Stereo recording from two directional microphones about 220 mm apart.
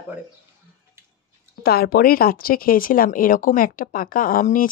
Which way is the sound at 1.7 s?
45° left (ahead or behind).